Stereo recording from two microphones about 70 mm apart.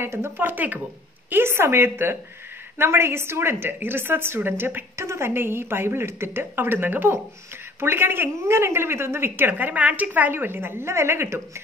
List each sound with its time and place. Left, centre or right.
0.0 s speech: right
1.3 s a woman's voice: right